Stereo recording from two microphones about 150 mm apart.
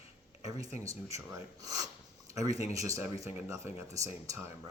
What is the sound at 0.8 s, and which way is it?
Speech, 20° right (ahead or behind).